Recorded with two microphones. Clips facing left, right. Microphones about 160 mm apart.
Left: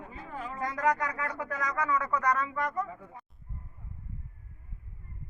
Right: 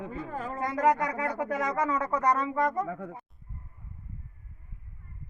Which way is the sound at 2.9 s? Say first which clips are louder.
Right 9 dB; 65° right (ahead or behind).